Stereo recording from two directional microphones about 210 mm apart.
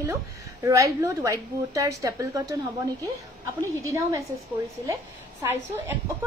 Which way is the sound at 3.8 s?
15° right (ahead or behind).